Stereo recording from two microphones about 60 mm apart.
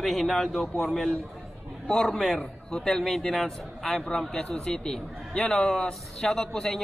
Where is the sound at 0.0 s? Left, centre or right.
Centre.